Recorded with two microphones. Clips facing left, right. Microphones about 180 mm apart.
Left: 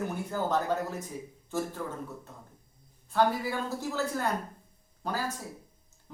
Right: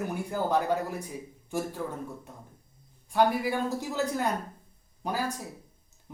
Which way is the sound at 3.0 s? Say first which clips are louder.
Right 2 dB; 15° right (ahead or behind).